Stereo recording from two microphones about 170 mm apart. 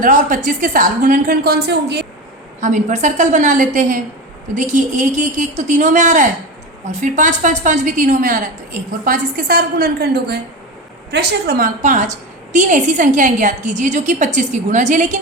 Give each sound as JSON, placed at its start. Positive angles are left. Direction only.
{"t": 0.0, "sound": "a woman's voice", "side_deg": -50}
{"t": 2.6, "sound": "a woman's voice", "side_deg": -45}
{"t": 11.1, "sound": "a woman's voice", "side_deg": -85}
{"t": 11.8, "sound": "a woman's voice", "side_deg": -45}